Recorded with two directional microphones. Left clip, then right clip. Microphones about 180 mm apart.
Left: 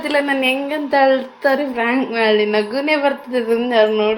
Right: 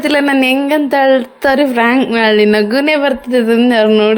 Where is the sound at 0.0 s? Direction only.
60° right (ahead or behind).